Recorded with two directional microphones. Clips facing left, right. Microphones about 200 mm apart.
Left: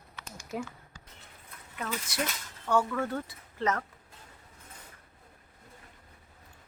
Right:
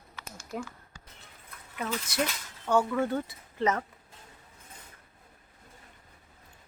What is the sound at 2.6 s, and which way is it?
Speech, 20° right (ahead or behind).